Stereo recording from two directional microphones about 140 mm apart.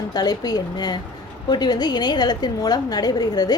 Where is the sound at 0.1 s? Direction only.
30° left (ahead or behind).